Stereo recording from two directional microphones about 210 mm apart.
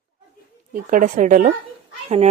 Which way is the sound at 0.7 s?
40° right (ahead or behind).